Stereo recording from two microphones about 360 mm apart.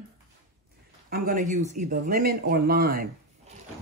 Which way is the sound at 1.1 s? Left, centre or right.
Right.